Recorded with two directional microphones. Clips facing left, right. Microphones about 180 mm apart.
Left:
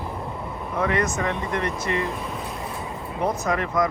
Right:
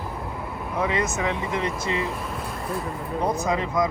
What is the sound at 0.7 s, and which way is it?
Speech, 10° right (ahead or behind).